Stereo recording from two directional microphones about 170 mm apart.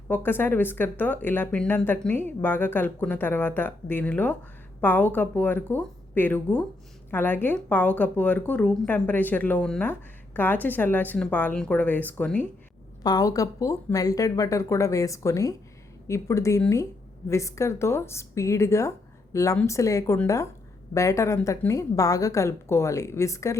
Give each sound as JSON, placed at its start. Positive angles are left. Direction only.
{"t": 0.1, "sound": "a woman's voice", "side_deg": 10}
{"t": 13.0, "sound": "a woman's voice", "side_deg": 25}